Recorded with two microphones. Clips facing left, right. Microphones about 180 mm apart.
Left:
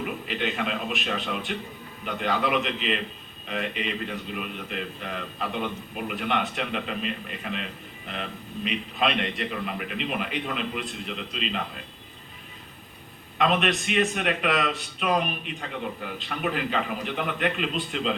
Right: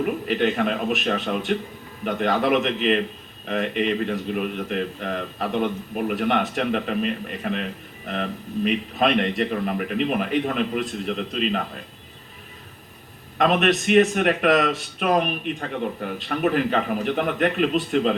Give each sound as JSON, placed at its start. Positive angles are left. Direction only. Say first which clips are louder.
{"t": 0.0, "sound": "speech", "louder": "right 8 dB", "side_deg": -45}
{"t": 13.4, "sound": "speech", "louder": "right 4 dB", "side_deg": -45}